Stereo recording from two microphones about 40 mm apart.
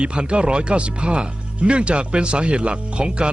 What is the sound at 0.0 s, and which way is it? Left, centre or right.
Speech, right.